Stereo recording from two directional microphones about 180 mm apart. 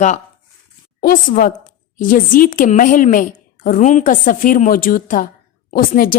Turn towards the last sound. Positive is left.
turn(degrees=55)  # may be behind; listen again after turning